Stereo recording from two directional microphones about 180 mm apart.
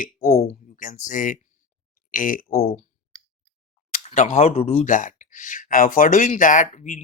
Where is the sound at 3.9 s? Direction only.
45° left (ahead or behind).